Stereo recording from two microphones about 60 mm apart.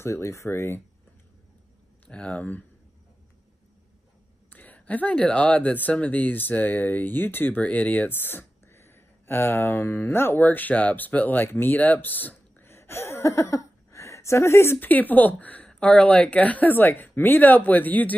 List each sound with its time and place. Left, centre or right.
0.0 s speech: left
2.0 s speech: centre
4.5 s speech: left
8.1 s speech: left
10.4 s speech: left
14.8 s speech: left